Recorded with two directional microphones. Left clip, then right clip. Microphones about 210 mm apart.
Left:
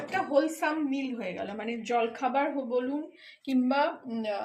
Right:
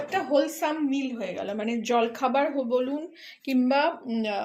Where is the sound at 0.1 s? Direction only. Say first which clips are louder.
Right 2 dB; 30° right (ahead or behind).